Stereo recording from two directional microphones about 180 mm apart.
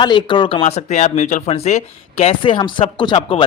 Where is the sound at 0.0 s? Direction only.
25° left (ahead or behind).